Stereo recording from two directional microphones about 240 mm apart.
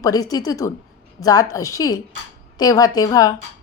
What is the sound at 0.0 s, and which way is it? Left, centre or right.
A woman's voice, centre.